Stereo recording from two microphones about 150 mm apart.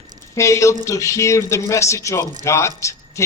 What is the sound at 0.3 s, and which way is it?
Speech, 20° left (ahead or behind).